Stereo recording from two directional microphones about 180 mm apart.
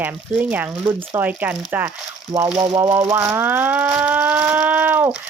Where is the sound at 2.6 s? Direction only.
25° right (ahead or behind).